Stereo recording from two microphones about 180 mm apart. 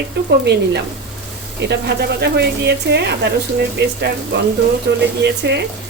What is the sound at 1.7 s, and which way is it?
Speech, 70° right (ahead or behind).